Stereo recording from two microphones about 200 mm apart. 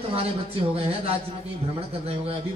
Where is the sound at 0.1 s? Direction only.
30° right (ahead or behind).